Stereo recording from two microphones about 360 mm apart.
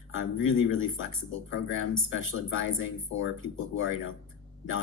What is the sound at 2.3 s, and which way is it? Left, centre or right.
Speech, left.